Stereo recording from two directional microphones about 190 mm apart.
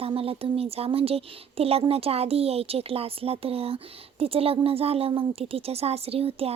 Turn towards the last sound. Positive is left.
turn(degrees=-30)  # may be behind; listen again after turning